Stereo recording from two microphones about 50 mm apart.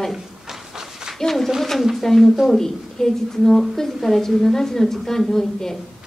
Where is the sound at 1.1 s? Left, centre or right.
Centre.